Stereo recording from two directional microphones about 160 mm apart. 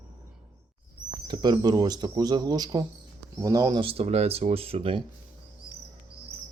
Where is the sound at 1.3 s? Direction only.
25° right (ahead or behind).